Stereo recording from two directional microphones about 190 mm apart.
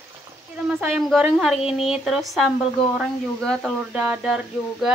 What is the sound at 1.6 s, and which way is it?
Speech, 30° left (ahead or behind).